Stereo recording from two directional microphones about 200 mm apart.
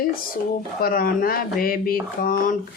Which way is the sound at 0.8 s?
45° left (ahead or behind).